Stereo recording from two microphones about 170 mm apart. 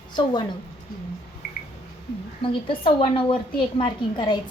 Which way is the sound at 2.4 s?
30° left (ahead or behind).